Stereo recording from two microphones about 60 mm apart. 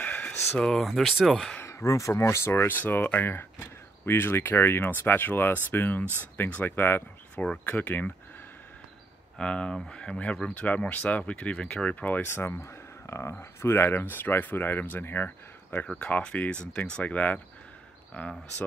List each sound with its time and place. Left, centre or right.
0.0 s a sound: left
0.6 s speech: centre
1.9 s speech: left
2.1 s speech: left
9.4 s speech: centre
11.9 s speech: left
12.3 s speech: left
16.0 s speech: centre